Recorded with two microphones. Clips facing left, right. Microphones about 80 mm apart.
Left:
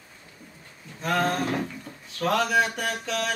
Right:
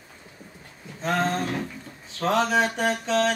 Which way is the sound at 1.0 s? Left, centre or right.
Right.